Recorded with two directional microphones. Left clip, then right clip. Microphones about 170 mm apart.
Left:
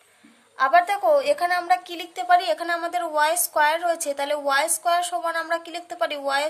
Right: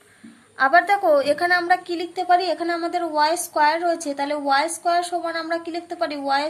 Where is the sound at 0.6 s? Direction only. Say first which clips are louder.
Right 2 dB; 20° left (ahead or behind).